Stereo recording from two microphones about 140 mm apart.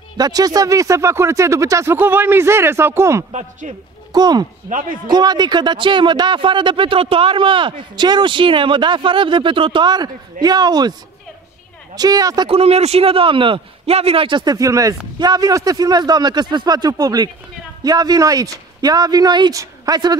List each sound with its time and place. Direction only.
0.2 s speech: 25° right (ahead or behind)
3.3 s speech: 55° right (ahead or behind)
4.1 s speech: 30° right (ahead or behind)
12.4 s a woman's voice: 45° right (ahead or behind); by 20.2 s 30° right (ahead or behind)